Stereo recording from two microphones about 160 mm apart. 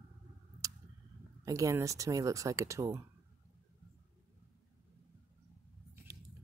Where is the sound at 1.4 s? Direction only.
20° right (ahead or behind).